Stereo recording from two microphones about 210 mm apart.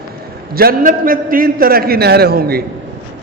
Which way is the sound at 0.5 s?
45° right (ahead or behind).